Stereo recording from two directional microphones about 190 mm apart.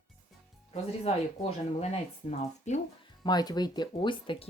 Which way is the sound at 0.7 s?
35° left (ahead or behind).